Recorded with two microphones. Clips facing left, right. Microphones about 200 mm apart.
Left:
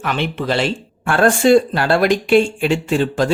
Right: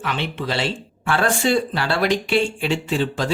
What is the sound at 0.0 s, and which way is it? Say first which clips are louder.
Speech: left 4 dB; 50° left (ahead or behind).